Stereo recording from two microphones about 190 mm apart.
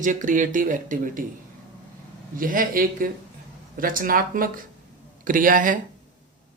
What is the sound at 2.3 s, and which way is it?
A man's voice, 45° right (ahead or behind).